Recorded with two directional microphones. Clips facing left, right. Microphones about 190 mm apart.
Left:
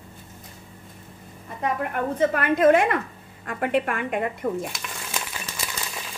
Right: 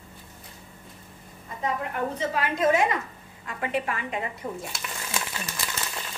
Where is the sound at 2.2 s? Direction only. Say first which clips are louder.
Left 8 dB; 55° left (ahead or behind).